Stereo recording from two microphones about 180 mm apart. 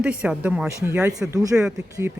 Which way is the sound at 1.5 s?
5° right (ahead or behind).